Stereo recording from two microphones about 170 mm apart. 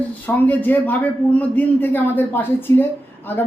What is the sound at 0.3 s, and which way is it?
Speech, 10° left (ahead or behind).